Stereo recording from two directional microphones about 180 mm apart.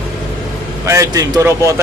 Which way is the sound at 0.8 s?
15° right (ahead or behind).